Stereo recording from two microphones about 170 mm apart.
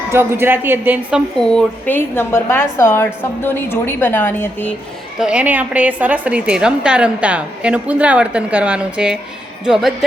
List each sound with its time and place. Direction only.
0.1 s a woman's voice: 15° right (ahead or behind)
1.4 s a woman's voice: 5° left (ahead or behind)
5.2 s a woman's voice: 5° right (ahead or behind)